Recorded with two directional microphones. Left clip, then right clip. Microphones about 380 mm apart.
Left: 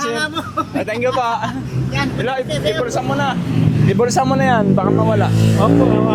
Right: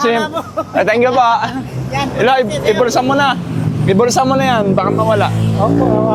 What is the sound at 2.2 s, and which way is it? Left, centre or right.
Speech, right.